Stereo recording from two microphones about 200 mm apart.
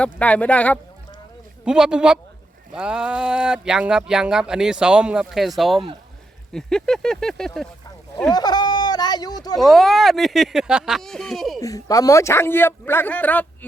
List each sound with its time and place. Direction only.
0.0 s speech: 5° left (ahead or behind)
1.6 s speech: 5° right (ahead or behind)
8.3 s speech: 20° left (ahead or behind)
9.6 s speech: centre (ahead or behind)
11.6 s speech: 15° left (ahead or behind)